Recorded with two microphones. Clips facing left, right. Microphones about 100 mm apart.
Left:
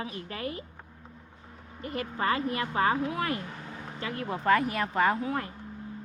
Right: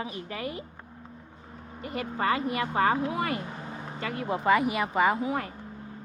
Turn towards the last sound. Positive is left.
turn(degrees=-10)  # may be behind; listen again after turning